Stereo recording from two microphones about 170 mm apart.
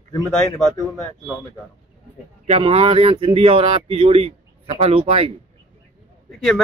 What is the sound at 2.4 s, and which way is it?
Speech, 40° right (ahead or behind).